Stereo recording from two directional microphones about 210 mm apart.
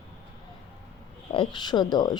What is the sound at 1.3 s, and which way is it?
Speech, 25° left (ahead or behind).